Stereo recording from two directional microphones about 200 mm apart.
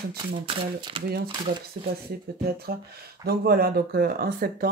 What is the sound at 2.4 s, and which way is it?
Speech, 50° right (ahead or behind).